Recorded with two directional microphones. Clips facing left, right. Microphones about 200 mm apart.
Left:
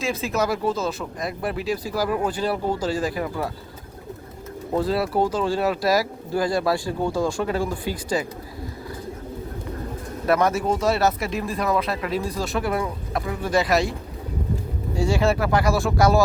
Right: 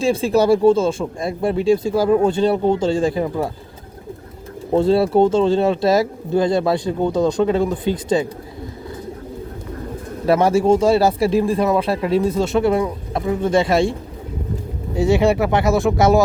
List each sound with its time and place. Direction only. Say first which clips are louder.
0.0 s speech: right 8 dB; 30° right (ahead or behind)
4.7 s speech: right 8 dB; 25° right (ahead or behind)
10.2 s speech: right 6 dB; 30° right (ahead or behind)
14.9 s speech: right 6 dB; 20° right (ahead or behind)